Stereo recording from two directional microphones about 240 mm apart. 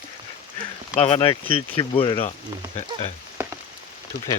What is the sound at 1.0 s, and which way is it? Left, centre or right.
Speech, left.